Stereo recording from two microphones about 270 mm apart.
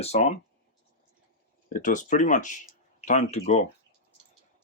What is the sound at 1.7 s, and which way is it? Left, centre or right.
Speech, left.